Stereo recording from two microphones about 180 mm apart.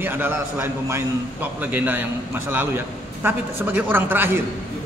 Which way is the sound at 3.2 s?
10° right (ahead or behind).